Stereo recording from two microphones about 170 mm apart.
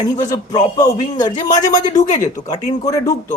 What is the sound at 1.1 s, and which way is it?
Speech, 25° left (ahead or behind).